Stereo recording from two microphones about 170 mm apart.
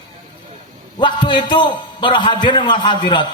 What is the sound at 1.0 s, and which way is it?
Speech, 30° left (ahead or behind).